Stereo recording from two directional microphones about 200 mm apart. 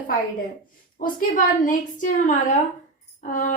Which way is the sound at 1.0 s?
45° left (ahead or behind).